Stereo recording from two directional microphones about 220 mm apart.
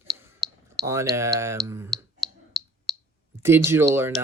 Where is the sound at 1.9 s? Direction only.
Centre (ahead or behind).